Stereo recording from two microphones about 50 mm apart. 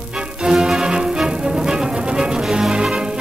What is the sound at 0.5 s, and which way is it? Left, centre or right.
Music, centre.